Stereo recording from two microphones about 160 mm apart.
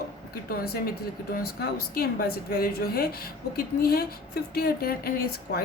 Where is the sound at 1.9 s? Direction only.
70° left (ahead or behind).